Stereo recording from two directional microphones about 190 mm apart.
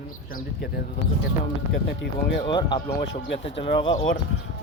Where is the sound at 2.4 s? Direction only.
25° left (ahead or behind).